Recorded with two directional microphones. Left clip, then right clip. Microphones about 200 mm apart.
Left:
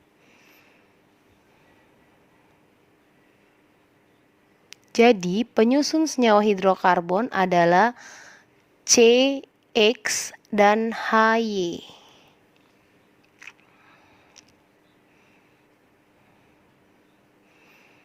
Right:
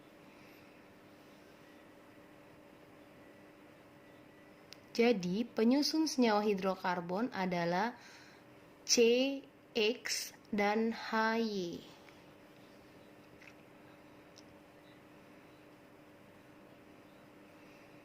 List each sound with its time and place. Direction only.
4.9 s speech: 50° left (ahead or behind)
13.4 s biting: 50° left (ahead or behind)